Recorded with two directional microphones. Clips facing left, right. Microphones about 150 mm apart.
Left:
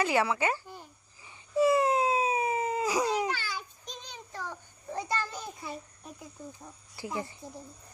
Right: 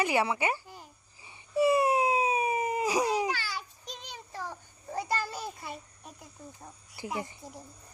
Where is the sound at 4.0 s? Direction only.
10° right (ahead or behind).